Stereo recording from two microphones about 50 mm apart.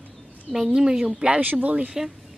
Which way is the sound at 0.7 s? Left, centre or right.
Centre.